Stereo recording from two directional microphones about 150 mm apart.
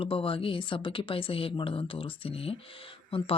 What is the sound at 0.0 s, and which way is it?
Speech, 35° left (ahead or behind).